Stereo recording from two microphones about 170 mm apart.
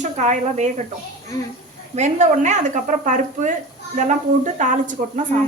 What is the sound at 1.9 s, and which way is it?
Speech, 40° right (ahead or behind).